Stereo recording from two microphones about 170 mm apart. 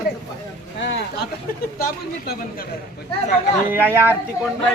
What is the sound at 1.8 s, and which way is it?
Speech, 60° left (ahead or behind).